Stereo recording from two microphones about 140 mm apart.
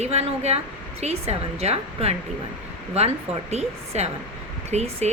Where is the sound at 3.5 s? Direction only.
50° right (ahead or behind).